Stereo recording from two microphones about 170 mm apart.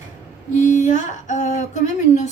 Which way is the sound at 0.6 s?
45° left (ahead or behind).